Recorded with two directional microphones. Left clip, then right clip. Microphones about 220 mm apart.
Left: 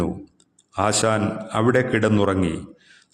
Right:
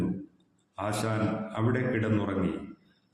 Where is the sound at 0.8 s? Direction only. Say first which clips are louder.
Left 11 dB; 45° left (ahead or behind).